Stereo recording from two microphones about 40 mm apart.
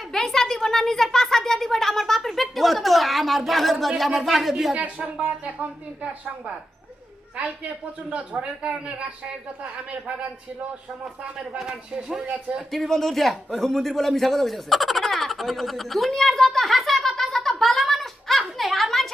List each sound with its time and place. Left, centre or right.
0.1 s a man's voice: centre
4.7 s speech: right
8.1 s speech: right
11.4 s speech: centre
11.7 s speech: right
12.7 s a man's voice: centre
17.2 s a sound: centre